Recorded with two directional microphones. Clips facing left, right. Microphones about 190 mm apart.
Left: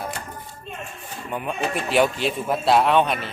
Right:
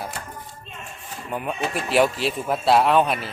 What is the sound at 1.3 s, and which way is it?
Speech, centre (ahead or behind).